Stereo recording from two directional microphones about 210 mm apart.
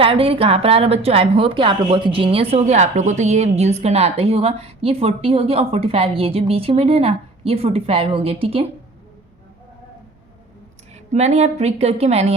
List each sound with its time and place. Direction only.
0.0 s speech: 25° right (ahead or behind)
11.1 s a woman's voice: 30° right (ahead or behind)